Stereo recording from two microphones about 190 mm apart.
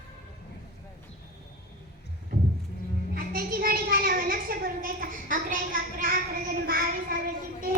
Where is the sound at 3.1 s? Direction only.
50° right (ahead or behind).